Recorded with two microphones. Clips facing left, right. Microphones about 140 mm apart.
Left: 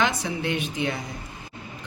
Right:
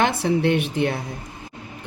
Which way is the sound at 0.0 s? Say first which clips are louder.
Right 6 dB; 60° right (ahead or behind).